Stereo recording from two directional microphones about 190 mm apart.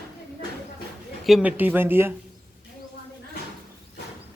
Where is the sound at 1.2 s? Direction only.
5° right (ahead or behind).